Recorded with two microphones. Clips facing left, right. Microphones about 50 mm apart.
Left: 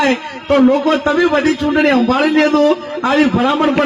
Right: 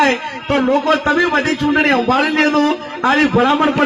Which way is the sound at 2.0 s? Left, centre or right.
Right.